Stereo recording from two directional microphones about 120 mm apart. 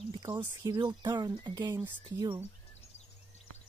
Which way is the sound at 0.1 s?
30° right (ahead or behind).